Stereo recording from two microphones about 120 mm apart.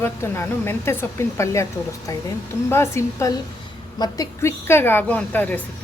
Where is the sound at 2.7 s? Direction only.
20° left (ahead or behind).